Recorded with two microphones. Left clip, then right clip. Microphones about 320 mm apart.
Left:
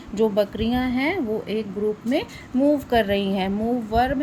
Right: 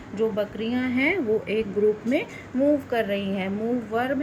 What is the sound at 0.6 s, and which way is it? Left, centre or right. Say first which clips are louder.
A woman's voice: left 1 dB; left.